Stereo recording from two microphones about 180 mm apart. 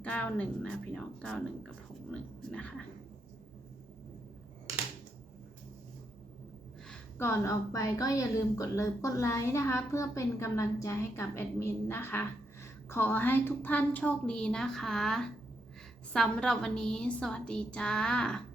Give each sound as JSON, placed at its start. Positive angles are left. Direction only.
{"t": 0.0, "sound": "a woman's voice", "side_deg": 10}
{"t": 2.5, "sound": "a woman's voice", "side_deg": 5}
{"t": 6.8, "sound": "a woman's voice", "side_deg": 10}